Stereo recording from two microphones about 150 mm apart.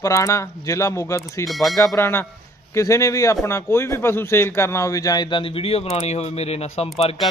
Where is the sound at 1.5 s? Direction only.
Centre (ahead or behind).